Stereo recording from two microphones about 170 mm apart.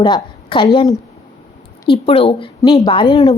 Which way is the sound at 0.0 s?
30° left (ahead or behind).